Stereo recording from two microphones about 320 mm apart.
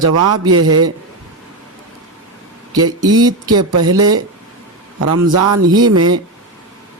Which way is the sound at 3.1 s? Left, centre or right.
Centre.